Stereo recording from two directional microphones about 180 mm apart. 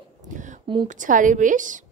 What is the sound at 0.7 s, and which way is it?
Speech, 30° right (ahead or behind).